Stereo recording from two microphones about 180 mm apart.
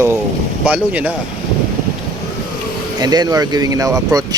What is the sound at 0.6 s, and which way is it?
Speech, 5° right (ahead or behind).